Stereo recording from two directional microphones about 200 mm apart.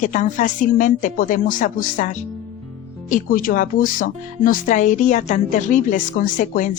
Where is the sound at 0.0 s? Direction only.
40° left (ahead or behind).